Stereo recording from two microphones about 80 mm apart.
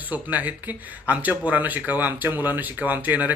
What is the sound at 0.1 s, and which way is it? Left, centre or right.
Speech, centre.